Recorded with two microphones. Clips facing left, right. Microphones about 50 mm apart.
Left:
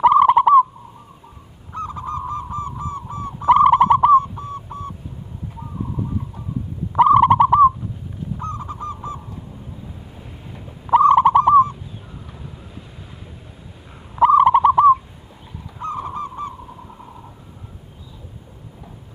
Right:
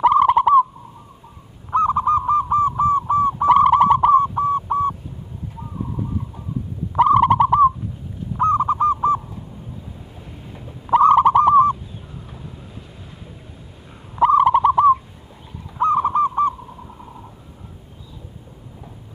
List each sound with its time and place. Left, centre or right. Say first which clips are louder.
0.0 s bird: left 2 dB; centre
1.7 s honk: right 11 dB; right
2.5 s a sound: right 11 dB; right
3.4 s bird: left 1 dB; centre
4.1 s a sound: even; right
7.0 s bird: left 2 dB; centre
8.4 s owl: right 15 dB; right
10.5 s turkey: left 1 dB; centre
11.1 s owl: even; centre
14.1 s bird: left 2 dB; centre
15.8 s goose: right 10 dB; right
16.6 s owl: even; centre